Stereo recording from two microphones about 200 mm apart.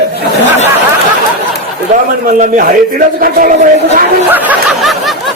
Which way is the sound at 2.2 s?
40° right (ahead or behind).